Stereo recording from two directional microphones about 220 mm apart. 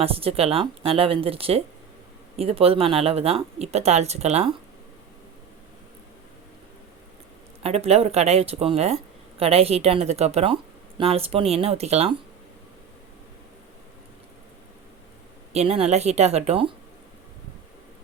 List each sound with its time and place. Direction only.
0.0 s a woman's voice: 25° right (ahead or behind)
7.6 s a woman's voice: 30° right (ahead or behind)
15.5 s a woman's voice: 30° right (ahead or behind)